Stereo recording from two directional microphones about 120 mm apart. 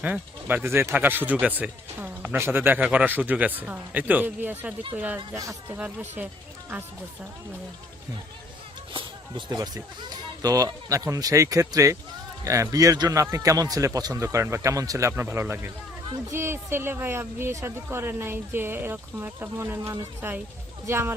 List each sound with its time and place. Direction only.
0.0 s speech: 15° right (ahead or behind)
8.9 s speech: 40° right (ahead or behind); by 21.1 s 20° right (ahead or behind)